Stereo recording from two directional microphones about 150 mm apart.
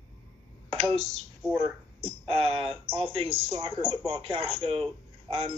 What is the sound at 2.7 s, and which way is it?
Speech, centre (ahead or behind).